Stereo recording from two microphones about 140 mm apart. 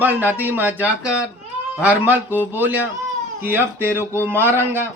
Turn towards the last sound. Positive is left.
turn(degrees=-15)  # may be behind; listen again after turning